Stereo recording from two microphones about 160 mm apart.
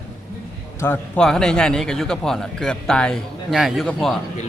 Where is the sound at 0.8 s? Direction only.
15° left (ahead or behind).